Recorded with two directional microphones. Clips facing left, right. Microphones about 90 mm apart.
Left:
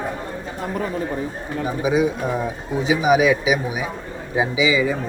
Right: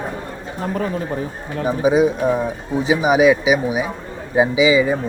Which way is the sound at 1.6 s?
30° right (ahead or behind).